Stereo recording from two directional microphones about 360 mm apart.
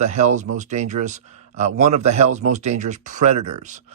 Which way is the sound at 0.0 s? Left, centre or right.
Centre.